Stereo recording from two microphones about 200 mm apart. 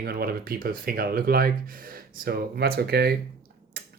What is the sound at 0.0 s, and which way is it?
Speech, 50° right (ahead or behind).